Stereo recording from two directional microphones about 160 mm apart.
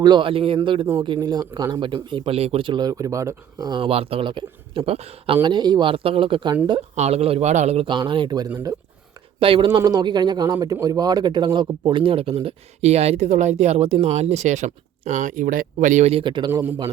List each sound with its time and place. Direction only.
0.0 s speech: 30° right (ahead or behind)
6.9 s speech: 40° right (ahead or behind)